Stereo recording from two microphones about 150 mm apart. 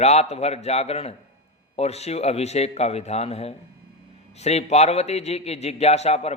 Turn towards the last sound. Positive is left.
turn(degrees=45)  # may be behind; listen again after turning